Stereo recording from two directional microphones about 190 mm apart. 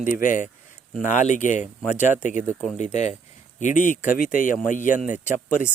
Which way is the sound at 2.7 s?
40° left (ahead or behind).